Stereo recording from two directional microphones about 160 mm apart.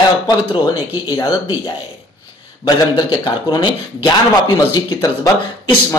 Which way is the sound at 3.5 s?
25° left (ahead or behind).